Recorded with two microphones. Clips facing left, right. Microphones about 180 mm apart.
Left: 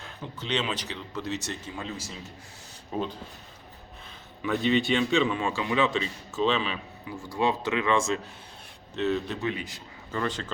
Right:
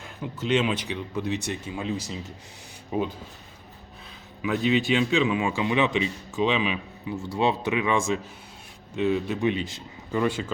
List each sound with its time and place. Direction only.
0.0 s a man's voice: 10° right (ahead or behind)
4.4 s a man's voice: 5° right (ahead or behind)
9.5 s a man's voice: 25° right (ahead or behind)
10.1 s a man's voice: 10° right (ahead or behind)